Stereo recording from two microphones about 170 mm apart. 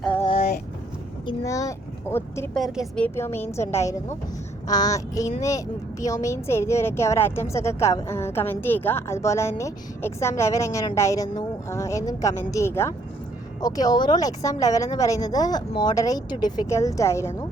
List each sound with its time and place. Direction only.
1.3 s speech: 20° left (ahead or behind)
2.6 s speech: centre (ahead or behind); by 17.4 s 15° left (ahead or behind)